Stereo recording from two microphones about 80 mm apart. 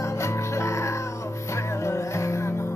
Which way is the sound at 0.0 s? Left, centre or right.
Left.